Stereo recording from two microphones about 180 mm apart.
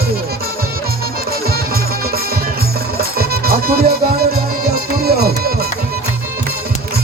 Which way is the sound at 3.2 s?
55° right (ahead or behind).